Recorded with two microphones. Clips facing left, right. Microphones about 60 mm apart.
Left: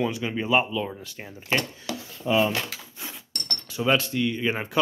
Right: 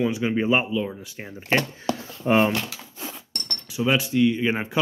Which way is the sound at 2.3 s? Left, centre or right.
Right.